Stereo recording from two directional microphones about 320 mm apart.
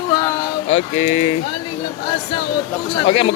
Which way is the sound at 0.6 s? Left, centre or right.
Left.